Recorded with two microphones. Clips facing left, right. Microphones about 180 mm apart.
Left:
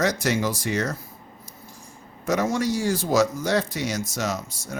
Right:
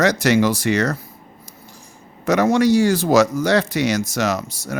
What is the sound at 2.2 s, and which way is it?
Speech, 75° right (ahead or behind).